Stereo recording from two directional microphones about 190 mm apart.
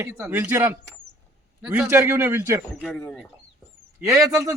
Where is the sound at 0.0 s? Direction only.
10° right (ahead or behind).